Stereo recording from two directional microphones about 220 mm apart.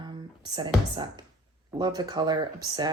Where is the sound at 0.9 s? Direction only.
20° right (ahead or behind).